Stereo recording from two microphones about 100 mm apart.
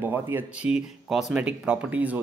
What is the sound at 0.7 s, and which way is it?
Speech, 5° right (ahead or behind).